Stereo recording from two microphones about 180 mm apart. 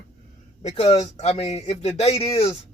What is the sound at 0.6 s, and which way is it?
A man's voice, 35° left (ahead or behind).